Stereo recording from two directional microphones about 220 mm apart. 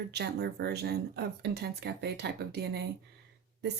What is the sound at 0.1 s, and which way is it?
Speech, 50° right (ahead or behind).